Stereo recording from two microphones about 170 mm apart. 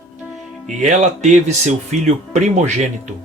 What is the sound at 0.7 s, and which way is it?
Speech, 45° right (ahead or behind).